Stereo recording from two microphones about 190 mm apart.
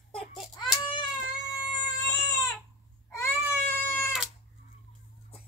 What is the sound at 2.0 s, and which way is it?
Baby cry, 20° left (ahead or behind).